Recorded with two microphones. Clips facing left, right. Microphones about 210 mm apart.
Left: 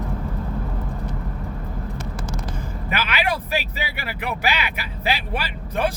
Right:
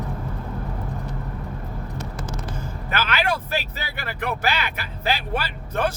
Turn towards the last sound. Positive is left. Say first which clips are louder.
# left 1 dB
turn(degrees=10)  # may be behind; listen again after turning